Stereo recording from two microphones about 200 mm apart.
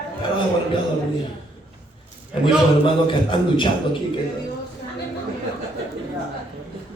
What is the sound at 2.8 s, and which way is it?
Speech, 25° left (ahead or behind).